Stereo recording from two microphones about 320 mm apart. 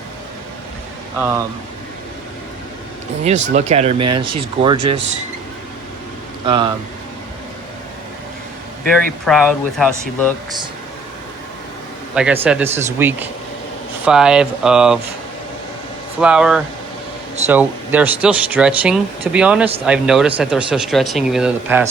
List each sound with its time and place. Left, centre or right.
3.2 s speech: right
6.4 s speech: centre
9.2 s speech: centre
12.1 s a man's voice: centre
16.2 s speech: centre